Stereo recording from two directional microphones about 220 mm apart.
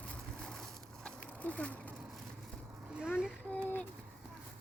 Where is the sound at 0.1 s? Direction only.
5° left (ahead or behind).